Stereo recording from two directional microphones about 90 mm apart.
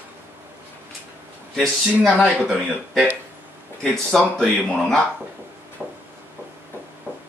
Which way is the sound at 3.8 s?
5° left (ahead or behind).